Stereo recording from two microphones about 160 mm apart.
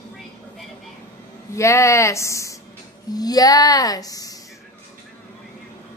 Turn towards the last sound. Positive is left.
turn(degrees=20)  # may be behind; listen again after turning